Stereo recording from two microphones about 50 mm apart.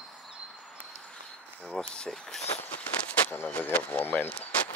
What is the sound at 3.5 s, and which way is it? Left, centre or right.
Speech, left.